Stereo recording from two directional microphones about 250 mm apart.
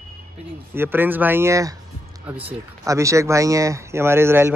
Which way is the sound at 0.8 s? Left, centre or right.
Centre.